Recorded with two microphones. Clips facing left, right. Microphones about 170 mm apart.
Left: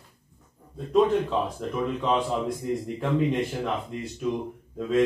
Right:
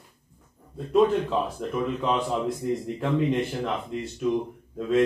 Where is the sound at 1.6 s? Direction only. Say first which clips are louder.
Right 1 dB; centre (ahead or behind).